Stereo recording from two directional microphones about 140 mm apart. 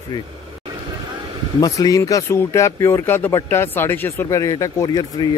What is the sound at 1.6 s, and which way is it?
Speech, 25° left (ahead or behind).